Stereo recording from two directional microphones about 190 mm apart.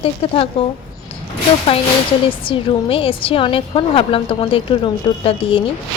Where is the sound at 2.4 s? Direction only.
30° left (ahead or behind).